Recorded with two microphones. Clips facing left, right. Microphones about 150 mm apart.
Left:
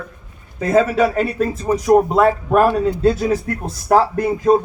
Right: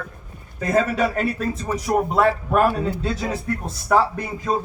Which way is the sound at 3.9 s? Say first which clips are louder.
Left 4 dB; 55° left (ahead or behind).